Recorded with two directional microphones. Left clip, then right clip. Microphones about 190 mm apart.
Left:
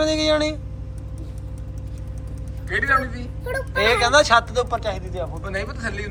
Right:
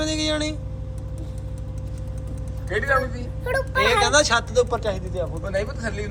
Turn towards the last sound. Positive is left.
turn(degrees=-30)  # may be behind; listen again after turning